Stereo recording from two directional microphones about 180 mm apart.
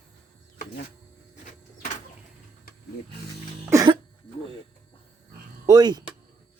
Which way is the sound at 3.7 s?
20° right (ahead or behind).